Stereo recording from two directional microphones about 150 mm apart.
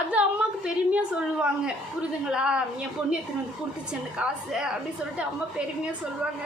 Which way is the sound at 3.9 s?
5° right (ahead or behind).